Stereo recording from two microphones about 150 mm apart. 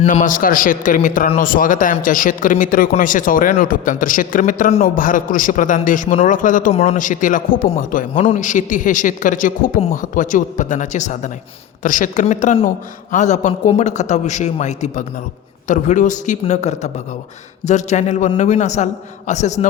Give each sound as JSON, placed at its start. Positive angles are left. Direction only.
{"t": 0.0, "sound": "a man's voice", "side_deg": 60}